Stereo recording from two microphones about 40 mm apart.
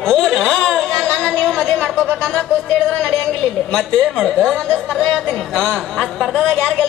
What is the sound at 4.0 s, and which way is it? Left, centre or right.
Speech, centre.